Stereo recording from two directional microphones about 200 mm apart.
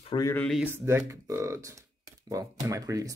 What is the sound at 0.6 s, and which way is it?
Speech, 10° right (ahead or behind).